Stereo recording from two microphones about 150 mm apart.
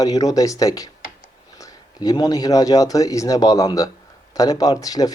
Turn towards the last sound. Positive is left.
turn(degrees=25)  # may be behind; listen again after turning